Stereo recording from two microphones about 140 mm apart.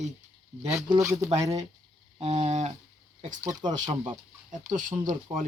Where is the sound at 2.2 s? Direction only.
55° right (ahead or behind).